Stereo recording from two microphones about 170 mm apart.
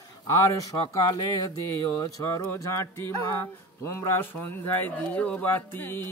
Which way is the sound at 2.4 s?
15° left (ahead or behind).